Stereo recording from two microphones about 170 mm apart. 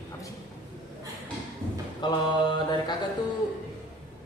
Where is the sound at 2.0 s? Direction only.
25° left (ahead or behind).